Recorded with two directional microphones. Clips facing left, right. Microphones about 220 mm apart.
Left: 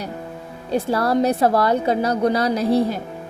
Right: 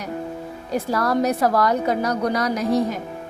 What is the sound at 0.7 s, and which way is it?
A woman's voice, 30° left (ahead or behind).